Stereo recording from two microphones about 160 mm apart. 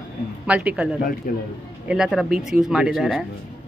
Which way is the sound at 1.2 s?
55° left (ahead or behind).